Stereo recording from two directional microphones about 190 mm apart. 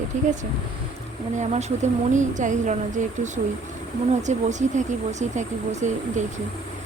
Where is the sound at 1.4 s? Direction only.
35° right (ahead or behind).